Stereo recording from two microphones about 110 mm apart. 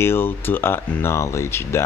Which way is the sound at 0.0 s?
20° left (ahead or behind).